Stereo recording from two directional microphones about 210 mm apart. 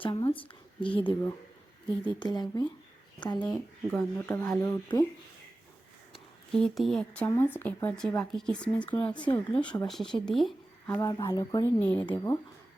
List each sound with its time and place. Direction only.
0.0 s speech: 20° left (ahead or behind)
2.1 s speech: 20° left (ahead or behind)
3.5 s speech: 5° left (ahead or behind)
4.9 s speech: 25° left (ahead or behind)
6.1 s speech: centre (ahead or behind)